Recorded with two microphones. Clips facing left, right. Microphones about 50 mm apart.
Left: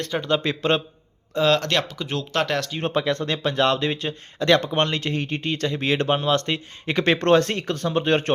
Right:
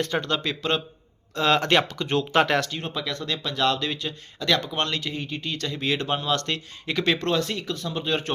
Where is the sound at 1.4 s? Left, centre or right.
Centre.